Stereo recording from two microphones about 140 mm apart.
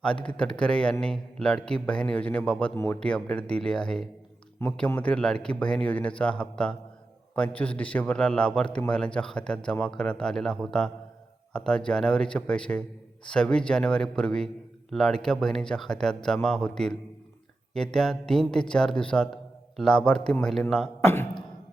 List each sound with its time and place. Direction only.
0.0 s a man's voice: 5° left (ahead or behind)
2.7 s a man's voice: 20° left (ahead or behind)
3.0 s a man's voice: 5° left (ahead or behind)
21.0 s a man's voice: 15° left (ahead or behind)